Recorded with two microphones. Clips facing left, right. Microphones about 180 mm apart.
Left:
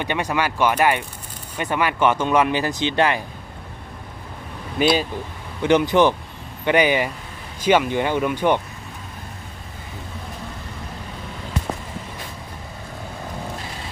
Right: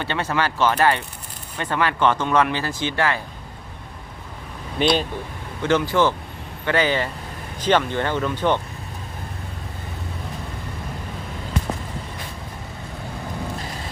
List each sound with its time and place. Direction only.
0.0 s speech: 15° left (ahead or behind)
4.8 s speech: 5° left (ahead or behind)
5.6 s speech: 20° left (ahead or behind)